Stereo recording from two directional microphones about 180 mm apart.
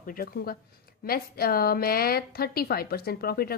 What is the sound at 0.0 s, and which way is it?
A woman's voice, 55° left (ahead or behind).